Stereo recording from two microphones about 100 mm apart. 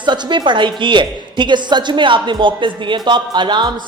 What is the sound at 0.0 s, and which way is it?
A woman's voice, 50° right (ahead or behind).